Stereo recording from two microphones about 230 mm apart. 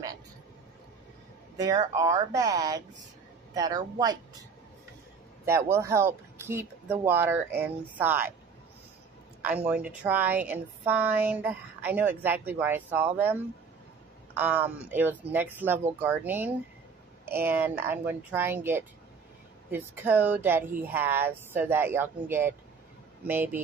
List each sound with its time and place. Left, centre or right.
1.6 s speech: centre
9.7 s speech: centre